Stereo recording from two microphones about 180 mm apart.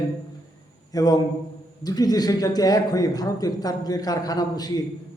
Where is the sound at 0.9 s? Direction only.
20° left (ahead or behind).